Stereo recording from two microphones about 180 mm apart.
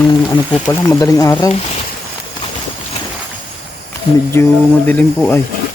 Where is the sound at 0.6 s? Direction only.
20° left (ahead or behind).